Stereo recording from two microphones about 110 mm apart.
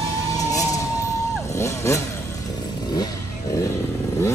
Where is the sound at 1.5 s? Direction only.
25° left (ahead or behind).